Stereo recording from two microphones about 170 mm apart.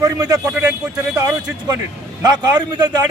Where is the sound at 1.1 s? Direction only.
20° right (ahead or behind).